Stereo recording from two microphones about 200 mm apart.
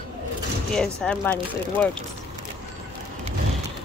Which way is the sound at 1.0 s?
5° left (ahead or behind).